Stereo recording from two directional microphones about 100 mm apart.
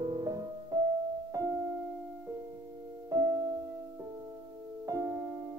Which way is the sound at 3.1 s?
30° right (ahead or behind).